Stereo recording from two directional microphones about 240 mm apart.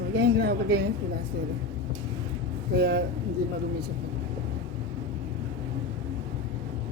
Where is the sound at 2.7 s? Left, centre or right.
Right.